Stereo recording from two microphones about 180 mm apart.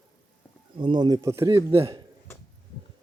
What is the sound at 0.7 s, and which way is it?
Speech, 25° right (ahead or behind).